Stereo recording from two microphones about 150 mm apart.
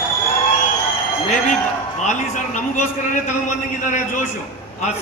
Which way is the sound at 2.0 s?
55° left (ahead or behind).